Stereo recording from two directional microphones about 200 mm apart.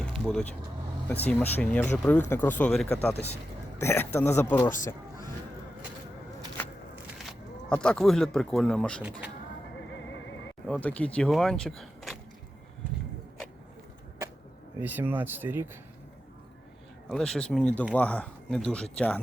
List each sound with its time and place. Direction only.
0.0 s vehicle: 5° left (ahead or behind)
1.0 s speech: 10° left (ahead or behind)
7.7 s speech: 5° left (ahead or behind)
10.7 s speech: 5° left (ahead or behind)
14.8 s speech: 10° right (ahead or behind)
17.1 s speech: centre (ahead or behind)